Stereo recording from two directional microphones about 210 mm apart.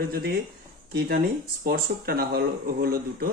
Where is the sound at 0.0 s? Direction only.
45° right (ahead or behind).